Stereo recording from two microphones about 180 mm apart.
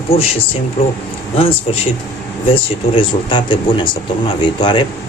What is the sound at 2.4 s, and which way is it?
Speech, 30° left (ahead or behind).